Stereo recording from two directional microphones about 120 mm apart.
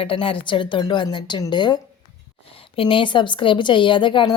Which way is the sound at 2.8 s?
45° left (ahead or behind).